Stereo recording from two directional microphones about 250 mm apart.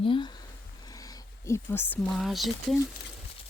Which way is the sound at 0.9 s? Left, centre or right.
Centre.